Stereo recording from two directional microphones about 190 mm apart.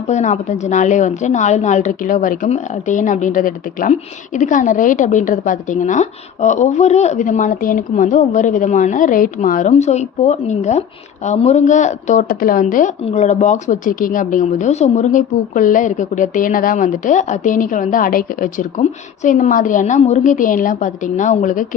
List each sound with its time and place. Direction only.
0.1 s a woman's voice: 40° left (ahead or behind)